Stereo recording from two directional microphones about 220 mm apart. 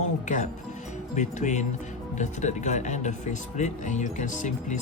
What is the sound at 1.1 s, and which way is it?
Speech, 35° left (ahead or behind).